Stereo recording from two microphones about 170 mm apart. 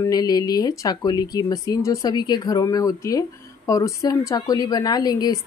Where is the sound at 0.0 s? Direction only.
20° left (ahead or behind).